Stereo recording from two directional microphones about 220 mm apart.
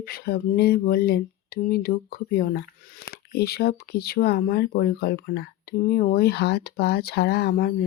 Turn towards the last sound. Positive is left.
turn(degrees=45)  # may be behind; listen again after turning